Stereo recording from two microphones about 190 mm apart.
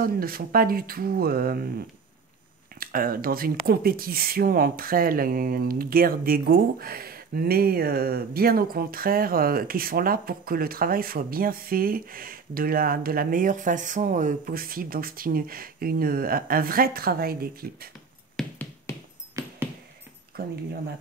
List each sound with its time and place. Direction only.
0.0 s speech: 50° right (ahead or behind)
2.8 s speech: 50° right (ahead or behind)
18.4 s finger snapping: centre (ahead or behind)
18.9 s a sound: 15° left (ahead or behind)
19.4 s a sound: 15° right (ahead or behind)
20.3 s speech: 55° right (ahead or behind)